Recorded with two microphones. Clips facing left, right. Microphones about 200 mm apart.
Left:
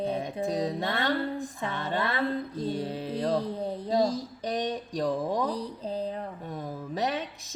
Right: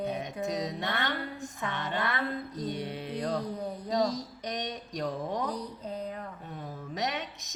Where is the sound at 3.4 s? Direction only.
25° left (ahead or behind).